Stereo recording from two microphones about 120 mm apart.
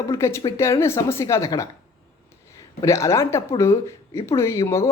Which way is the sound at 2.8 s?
25° left (ahead or behind).